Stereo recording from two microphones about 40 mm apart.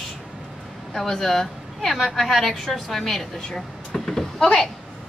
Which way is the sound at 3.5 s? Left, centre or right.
Centre.